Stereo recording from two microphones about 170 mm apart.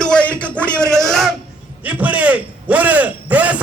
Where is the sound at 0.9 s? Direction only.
15° right (ahead or behind).